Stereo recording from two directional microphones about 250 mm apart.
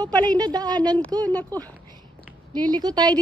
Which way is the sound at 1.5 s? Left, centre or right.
Centre.